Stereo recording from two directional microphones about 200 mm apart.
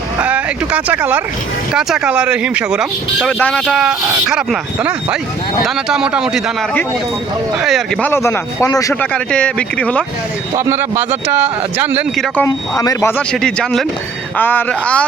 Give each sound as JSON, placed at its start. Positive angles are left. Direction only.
{"t": 0.2, "sound": "speech", "side_deg": -5}
{"t": 8.1, "sound": "speech", "side_deg": 15}
{"t": 10.6, "sound": "speech", "side_deg": -10}
{"t": 12.5, "sound": "speech", "side_deg": 15}
{"t": 13.3, "sound": "speech", "side_deg": 0}